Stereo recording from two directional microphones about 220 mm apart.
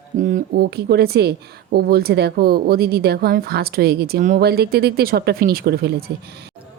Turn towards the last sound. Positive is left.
turn(degrees=-45)  # may be behind; listen again after turning